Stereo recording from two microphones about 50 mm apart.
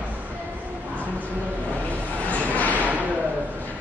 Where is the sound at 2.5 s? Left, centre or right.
Left.